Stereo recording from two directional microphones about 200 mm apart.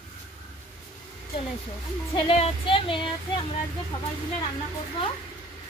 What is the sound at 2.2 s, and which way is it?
Speech, 30° left (ahead or behind).